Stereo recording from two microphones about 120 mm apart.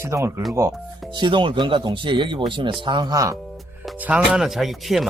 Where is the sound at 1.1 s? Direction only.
40° right (ahead or behind).